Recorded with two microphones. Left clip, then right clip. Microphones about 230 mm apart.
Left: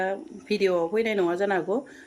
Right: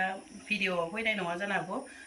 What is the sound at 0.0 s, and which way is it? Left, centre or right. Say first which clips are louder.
Speech: left 5 dB; left.